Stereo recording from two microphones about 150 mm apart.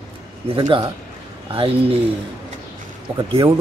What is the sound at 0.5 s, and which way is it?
Speech, 35° right (ahead or behind).